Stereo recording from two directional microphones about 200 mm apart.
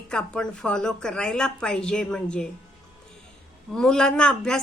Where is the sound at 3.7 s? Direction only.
5° left (ahead or behind).